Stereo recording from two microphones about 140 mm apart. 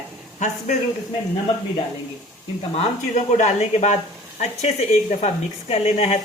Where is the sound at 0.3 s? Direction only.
55° left (ahead or behind).